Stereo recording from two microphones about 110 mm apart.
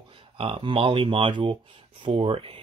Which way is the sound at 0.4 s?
55° right (ahead or behind).